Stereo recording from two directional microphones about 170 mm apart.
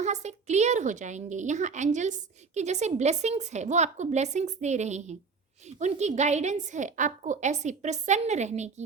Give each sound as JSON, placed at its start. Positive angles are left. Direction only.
{"t": 0.0, "sound": "a woman's voice", "side_deg": -40}